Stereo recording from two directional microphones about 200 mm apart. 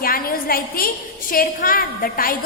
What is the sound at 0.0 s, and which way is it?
A woman's voice, 45° left (ahead or behind).